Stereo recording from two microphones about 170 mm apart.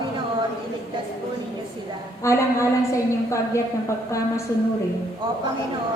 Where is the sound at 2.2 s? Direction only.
15° left (ahead or behind).